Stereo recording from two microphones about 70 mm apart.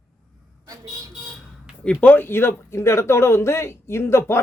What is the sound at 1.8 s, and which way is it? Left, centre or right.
A man's voice, left.